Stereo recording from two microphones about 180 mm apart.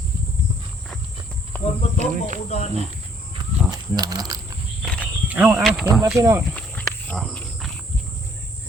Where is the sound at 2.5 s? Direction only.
35° left (ahead or behind).